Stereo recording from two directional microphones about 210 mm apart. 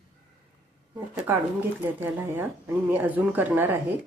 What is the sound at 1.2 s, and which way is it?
Speech, 10° right (ahead or behind).